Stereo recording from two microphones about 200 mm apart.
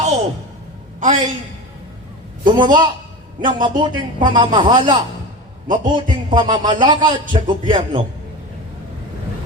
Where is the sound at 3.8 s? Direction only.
20° right (ahead or behind).